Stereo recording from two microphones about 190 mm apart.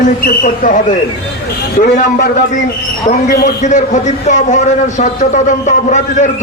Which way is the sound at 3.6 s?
40° left (ahead or behind).